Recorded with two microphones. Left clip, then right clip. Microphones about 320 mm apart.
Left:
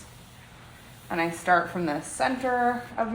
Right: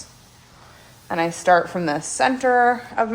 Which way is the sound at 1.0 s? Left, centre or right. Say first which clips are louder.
Right 6 dB; right.